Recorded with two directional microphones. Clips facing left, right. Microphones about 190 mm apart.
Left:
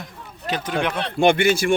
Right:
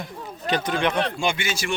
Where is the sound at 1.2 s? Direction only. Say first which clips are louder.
Left 9 dB; 60° left (ahead or behind).